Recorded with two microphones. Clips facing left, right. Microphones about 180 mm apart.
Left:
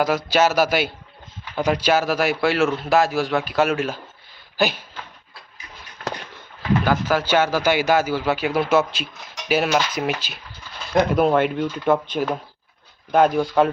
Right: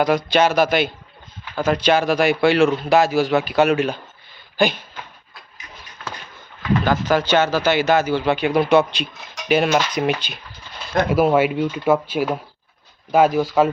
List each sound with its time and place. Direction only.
0.0 s speech: 5° left (ahead or behind)
6.9 s speech: 5° left (ahead or behind)